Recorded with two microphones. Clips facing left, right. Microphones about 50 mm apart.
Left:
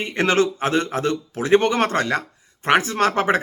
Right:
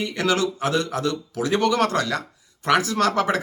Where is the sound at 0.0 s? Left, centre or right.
Left.